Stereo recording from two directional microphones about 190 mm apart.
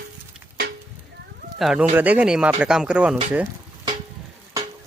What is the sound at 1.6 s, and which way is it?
Speech, centre (ahead or behind).